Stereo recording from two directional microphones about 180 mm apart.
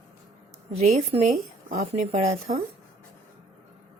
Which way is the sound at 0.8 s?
40° right (ahead or behind).